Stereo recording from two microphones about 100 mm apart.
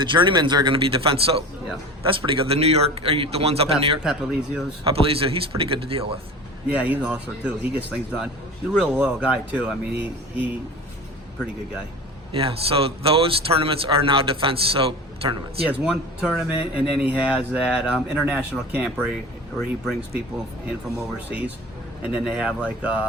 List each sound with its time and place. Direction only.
0.0 s speech: 55° right (ahead or behind); by 1.5 s 75° right (ahead or behind)
2.0 s speech: 60° right (ahead or behind)
4.0 s a man's voice: 5° right (ahead or behind)
4.8 s a man's voice: 70° right (ahead or behind)
6.7 s speech: 15° right (ahead or behind)
12.3 s a man's voice: 70° right (ahead or behind)
15.6 s speech: 15° right (ahead or behind)
19.5 s a man's voice: centre (ahead or behind)
21.2 s speech: 15° right (ahead or behind)